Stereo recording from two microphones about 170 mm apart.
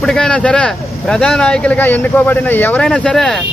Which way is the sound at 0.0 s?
5° left (ahead or behind).